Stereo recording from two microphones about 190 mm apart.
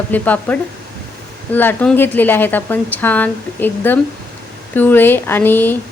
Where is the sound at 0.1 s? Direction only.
10° left (ahead or behind).